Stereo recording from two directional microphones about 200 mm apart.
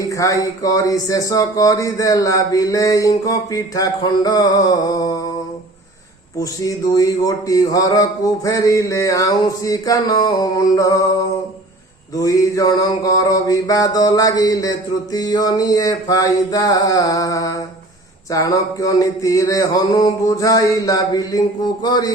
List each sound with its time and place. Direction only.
0.0 s speech: 15° left (ahead or behind)
6.4 s speech: 15° left (ahead or behind)
12.1 s speech: 15° left (ahead or behind)
21.8 s a sound: 20° left (ahead or behind)